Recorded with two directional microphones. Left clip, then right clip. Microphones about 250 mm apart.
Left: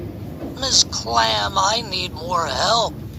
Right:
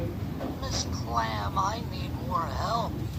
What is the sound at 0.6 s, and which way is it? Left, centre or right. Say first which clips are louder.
Speech: left 16 dB; left.